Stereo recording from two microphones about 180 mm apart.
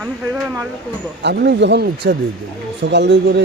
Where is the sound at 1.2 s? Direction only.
70° right (ahead or behind).